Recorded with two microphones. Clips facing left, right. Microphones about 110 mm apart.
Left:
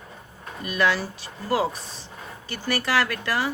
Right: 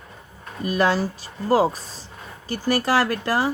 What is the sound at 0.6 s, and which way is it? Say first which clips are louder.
Speech: right 3 dB; 35° right (ahead or behind).